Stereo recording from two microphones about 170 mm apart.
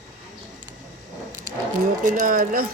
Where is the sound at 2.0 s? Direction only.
50° right (ahead or behind).